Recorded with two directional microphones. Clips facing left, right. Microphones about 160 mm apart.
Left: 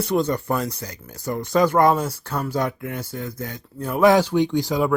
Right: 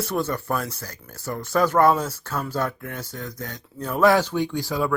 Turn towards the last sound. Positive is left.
turn(degrees=20)  # may be behind; listen again after turning